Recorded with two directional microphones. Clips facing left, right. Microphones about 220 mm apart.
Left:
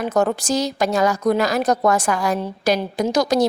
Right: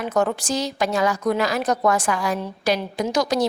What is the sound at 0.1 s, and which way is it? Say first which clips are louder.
A woman's voice: left 2 dB; 40° left (ahead or behind).